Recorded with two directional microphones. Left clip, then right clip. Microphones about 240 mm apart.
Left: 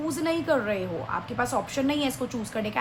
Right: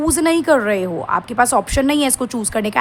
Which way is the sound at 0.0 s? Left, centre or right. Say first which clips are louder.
Right 11 dB; right.